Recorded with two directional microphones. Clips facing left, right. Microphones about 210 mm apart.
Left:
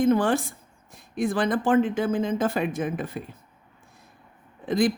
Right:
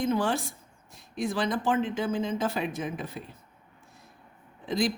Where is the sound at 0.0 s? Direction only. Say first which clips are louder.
Left 6 dB; 55° left (ahead or behind).